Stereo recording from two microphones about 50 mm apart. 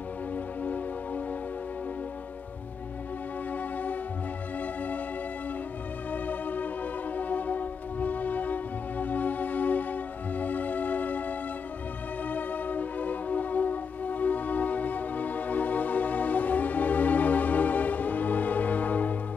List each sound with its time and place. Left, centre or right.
0.7 s music: left
3.5 s music: left
6.1 s music: left